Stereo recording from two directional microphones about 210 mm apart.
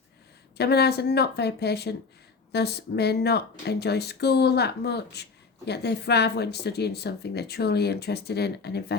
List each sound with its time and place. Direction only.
0.5 s speech: 50° left (ahead or behind)